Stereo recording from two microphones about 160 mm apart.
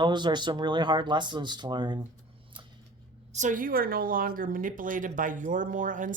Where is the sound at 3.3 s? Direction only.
50° right (ahead or behind).